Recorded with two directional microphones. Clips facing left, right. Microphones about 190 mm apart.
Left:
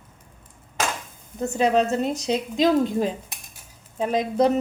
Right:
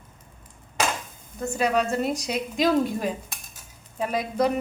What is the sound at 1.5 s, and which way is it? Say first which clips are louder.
A woman's voice: left 3 dB; 25° left (ahead or behind).